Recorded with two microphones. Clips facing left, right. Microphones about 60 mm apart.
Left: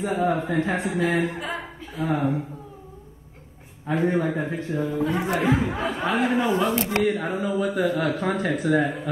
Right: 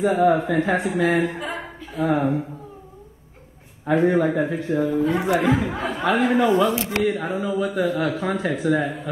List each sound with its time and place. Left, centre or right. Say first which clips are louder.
0.0 s speech: right 6 dB; right
1.5 s a sound: right 1 dB; right
3.8 s a man's voice: right 5 dB; right
5.7 s speech: even; centre
6.0 s a man's voice: right 5 dB; right
6.6 s speech: right 2 dB; left